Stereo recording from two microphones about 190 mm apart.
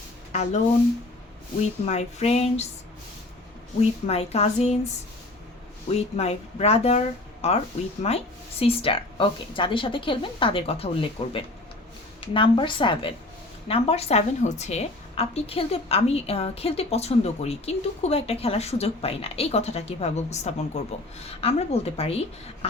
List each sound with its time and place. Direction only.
1.8 s a woman's voice: 35° left (ahead or behind)
3.8 s a woman's voice: 35° left (ahead or behind)
5.9 s a woman's voice: 35° left (ahead or behind)